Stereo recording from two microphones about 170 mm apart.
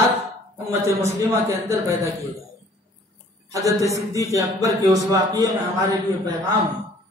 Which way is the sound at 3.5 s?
20° right (ahead or behind).